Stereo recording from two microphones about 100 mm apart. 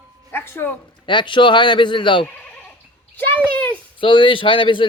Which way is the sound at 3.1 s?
20° left (ahead or behind).